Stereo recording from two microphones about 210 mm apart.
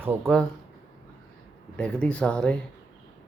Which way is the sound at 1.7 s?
5° left (ahead or behind).